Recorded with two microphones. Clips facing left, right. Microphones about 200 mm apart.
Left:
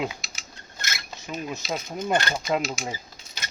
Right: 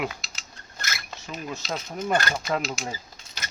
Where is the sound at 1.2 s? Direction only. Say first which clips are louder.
Left 3 dB; 20° left (ahead or behind).